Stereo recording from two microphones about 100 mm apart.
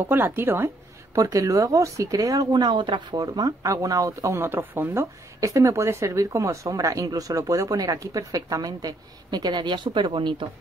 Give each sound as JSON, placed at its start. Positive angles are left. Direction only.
{"t": 0.0, "sound": "a woman's voice", "side_deg": -20}
{"t": 1.1, "sound": "speech", "side_deg": -35}